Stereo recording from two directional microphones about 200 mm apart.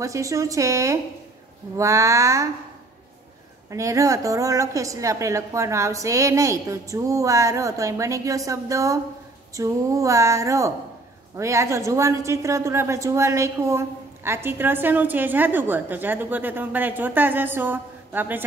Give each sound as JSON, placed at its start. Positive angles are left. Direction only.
{"t": 0.0, "sound": "a woman's voice", "side_deg": -15}
{"t": 3.7, "sound": "a woman's voice", "side_deg": -15}